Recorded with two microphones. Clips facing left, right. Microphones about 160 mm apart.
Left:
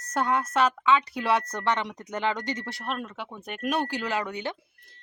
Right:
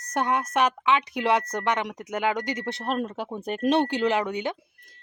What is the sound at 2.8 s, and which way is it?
Speech, 35° right (ahead or behind).